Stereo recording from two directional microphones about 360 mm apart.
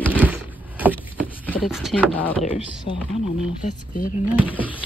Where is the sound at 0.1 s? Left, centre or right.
Centre.